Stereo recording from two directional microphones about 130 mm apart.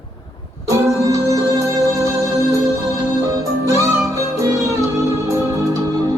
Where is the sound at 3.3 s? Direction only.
25° right (ahead or behind).